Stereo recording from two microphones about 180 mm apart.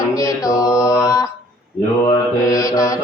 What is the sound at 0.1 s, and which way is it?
Mantra, 20° left (ahead or behind).